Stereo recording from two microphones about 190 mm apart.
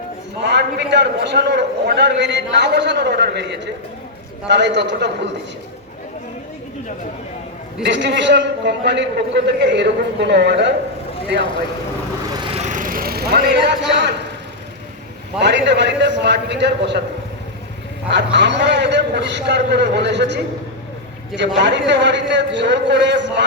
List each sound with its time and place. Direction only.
0.4 s a man's voice: 65° right (ahead or behind)
7.9 s a man's voice: 70° right (ahead or behind)
12.4 s a sound: 30° right (ahead or behind); by 14.1 s 65° right (ahead or behind)
15.4 s a man's voice: 65° right (ahead or behind)
18.1 s a man's voice: 70° right (ahead or behind)